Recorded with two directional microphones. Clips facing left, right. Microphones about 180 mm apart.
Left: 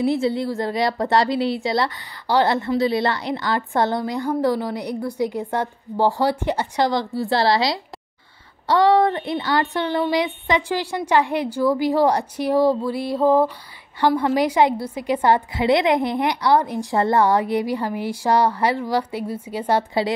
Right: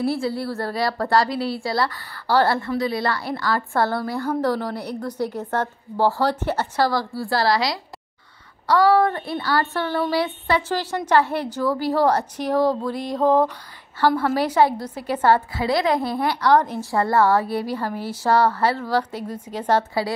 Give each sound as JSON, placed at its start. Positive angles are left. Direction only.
{"t": 0.0, "sound": "a woman's voice", "side_deg": 20}
{"t": 19.9, "sound": "a woman's voice", "side_deg": 20}